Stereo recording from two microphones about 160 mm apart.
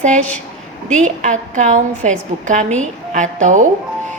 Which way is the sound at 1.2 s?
50° right (ahead or behind).